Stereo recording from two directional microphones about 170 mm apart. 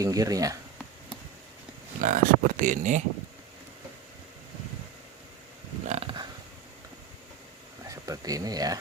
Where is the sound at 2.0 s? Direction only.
50° right (ahead or behind).